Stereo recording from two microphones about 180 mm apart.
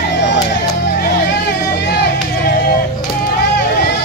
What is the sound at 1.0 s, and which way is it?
Hubbub, 65° left (ahead or behind).